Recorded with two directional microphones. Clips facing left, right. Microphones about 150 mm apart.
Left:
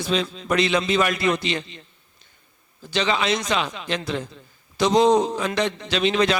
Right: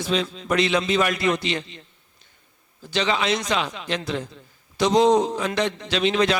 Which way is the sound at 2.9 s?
20° right (ahead or behind).